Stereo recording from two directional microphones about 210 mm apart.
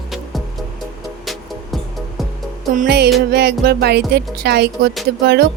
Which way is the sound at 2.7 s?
50° right (ahead or behind).